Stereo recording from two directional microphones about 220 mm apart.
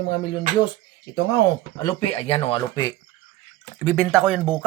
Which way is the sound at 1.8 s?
25° left (ahead or behind).